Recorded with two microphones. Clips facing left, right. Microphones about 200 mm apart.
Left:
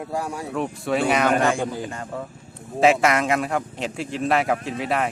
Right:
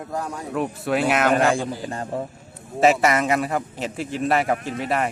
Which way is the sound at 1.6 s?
35° right (ahead or behind).